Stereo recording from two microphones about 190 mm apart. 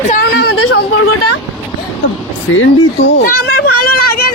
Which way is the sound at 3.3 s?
55° left (ahead or behind).